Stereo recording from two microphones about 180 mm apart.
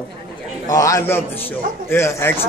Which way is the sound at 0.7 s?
20° left (ahead or behind).